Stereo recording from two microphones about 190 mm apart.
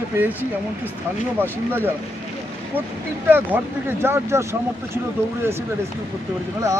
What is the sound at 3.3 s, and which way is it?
Speech, 10° right (ahead or behind).